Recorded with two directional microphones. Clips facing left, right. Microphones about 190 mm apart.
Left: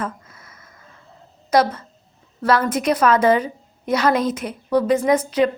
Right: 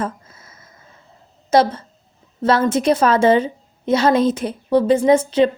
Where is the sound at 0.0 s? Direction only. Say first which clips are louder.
Right 3 dB; 25° right (ahead or behind).